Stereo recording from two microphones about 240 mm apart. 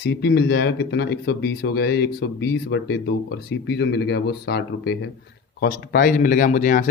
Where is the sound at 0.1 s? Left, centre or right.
Left.